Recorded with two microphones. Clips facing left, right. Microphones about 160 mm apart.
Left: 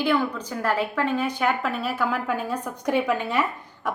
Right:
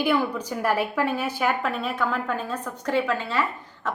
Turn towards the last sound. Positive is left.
turn(degrees=15)  # may be behind; listen again after turning